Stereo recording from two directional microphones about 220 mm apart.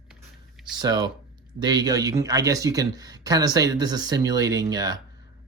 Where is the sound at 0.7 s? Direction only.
20° right (ahead or behind).